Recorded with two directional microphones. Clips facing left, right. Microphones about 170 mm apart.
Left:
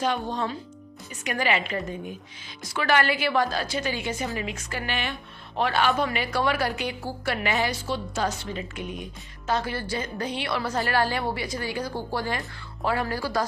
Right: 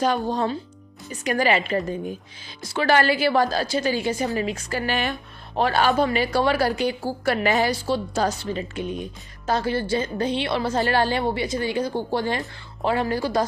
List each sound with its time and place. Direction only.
0.0 s a woman's voice: 40° right (ahead or behind); by 13.4 s 20° right (ahead or behind)